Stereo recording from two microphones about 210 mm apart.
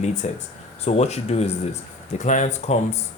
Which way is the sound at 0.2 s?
35° left (ahead or behind).